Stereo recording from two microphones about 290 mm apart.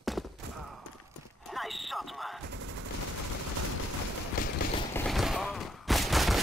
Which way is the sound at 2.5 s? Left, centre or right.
Right.